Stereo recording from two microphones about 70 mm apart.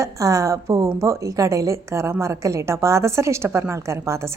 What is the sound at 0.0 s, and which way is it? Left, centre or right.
A woman's voice, right.